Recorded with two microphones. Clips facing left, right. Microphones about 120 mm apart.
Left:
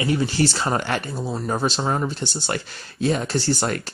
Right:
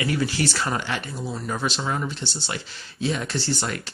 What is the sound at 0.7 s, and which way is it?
Speech, 50° left (ahead or behind).